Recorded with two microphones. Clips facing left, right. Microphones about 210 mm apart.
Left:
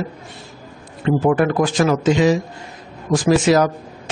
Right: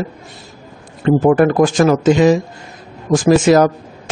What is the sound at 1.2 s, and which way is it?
Speech, 45° right (ahead or behind).